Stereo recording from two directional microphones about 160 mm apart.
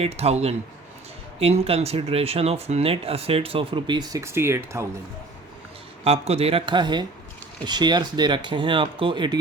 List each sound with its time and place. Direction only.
0.0 s speech: 40° right (ahead or behind)
4.2 s speech: 15° right (ahead or behind)
6.1 s speech: 40° right (ahead or behind)